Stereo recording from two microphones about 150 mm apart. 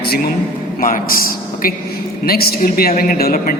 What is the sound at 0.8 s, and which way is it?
Speech, 70° left (ahead or behind).